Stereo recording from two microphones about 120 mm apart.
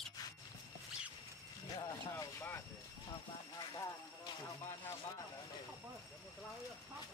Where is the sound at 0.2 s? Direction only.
30° left (ahead or behind).